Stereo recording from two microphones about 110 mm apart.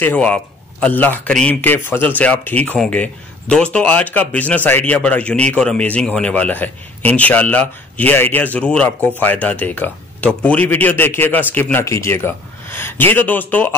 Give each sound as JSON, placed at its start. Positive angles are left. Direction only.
{"t": 0.0, "sound": "a man's voice", "side_deg": 10}